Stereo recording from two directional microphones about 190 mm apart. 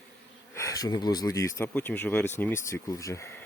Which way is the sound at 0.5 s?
15° left (ahead or behind).